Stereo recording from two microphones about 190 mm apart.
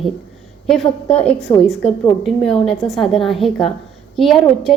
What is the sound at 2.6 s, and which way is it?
A woman's voice, centre (ahead or behind).